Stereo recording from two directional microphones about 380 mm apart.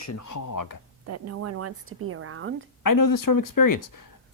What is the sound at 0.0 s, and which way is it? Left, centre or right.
Speech, left.